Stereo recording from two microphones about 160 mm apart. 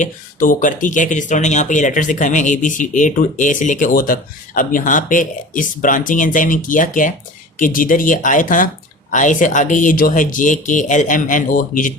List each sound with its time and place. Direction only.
0.0 s speech: 55° left (ahead or behind)